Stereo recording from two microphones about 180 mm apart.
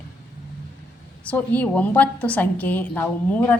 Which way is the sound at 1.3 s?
10° left (ahead or behind).